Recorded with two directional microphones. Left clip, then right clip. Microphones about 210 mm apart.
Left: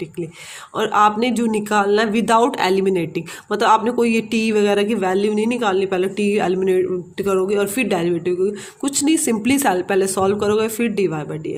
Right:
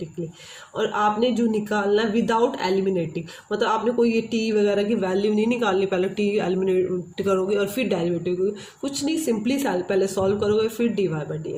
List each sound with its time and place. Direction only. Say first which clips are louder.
0.8 s speech: left 6 dB; 45° left (ahead or behind)